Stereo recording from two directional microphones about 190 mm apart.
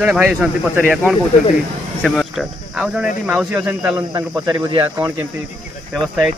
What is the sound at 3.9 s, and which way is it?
Speech, 20° right (ahead or behind).